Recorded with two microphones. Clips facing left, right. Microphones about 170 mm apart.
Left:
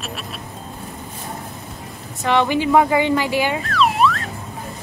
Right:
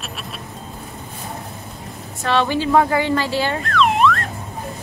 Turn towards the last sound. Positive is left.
turn(degrees=0)  # may be behind; listen again after turning